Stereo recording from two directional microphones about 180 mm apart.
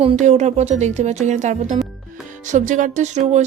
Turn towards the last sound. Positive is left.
turn(degrees=-40)  # may be behind; listen again after turning